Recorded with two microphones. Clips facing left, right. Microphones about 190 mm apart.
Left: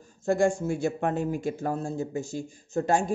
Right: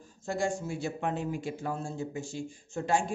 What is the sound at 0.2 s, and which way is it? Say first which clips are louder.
Speech: left 8 dB; 50° left (ahead or behind).